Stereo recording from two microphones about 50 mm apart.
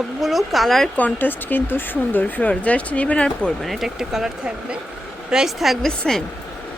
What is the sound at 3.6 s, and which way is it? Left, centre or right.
A woman's voice, centre.